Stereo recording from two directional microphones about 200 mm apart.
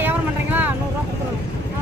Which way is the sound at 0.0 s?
10° right (ahead or behind).